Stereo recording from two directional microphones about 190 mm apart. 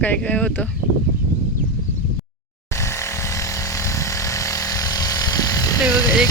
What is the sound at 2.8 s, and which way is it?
Vehicle, 15° left (ahead or behind).